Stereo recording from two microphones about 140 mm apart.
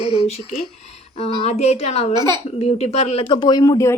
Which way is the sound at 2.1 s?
30° right (ahead or behind).